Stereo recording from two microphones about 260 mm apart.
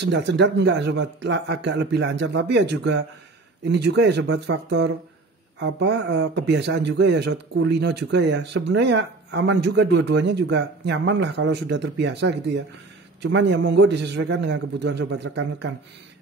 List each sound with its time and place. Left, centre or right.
0.0 s a man's voice: right